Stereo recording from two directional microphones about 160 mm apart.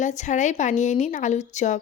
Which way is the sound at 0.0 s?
50° left (ahead or behind).